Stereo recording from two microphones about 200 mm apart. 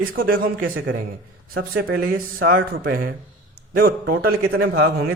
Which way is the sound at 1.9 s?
45° right (ahead or behind).